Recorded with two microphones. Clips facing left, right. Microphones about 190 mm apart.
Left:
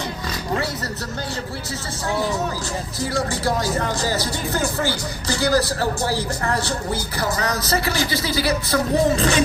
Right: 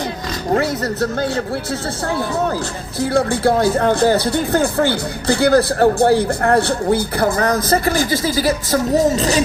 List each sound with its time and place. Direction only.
3.0 s speech: 60° right (ahead or behind); by 9.4 s 40° right (ahead or behind)